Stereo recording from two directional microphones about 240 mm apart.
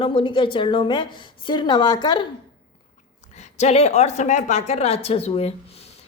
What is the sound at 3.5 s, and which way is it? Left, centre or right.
Speech, left.